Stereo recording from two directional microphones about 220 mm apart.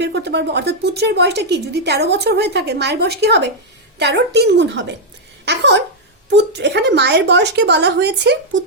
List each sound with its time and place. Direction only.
0.0 s a woman's voice: 50° right (ahead or behind)